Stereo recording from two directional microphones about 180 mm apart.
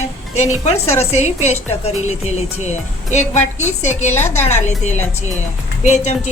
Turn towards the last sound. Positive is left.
turn(degrees=40)  # may be behind; listen again after turning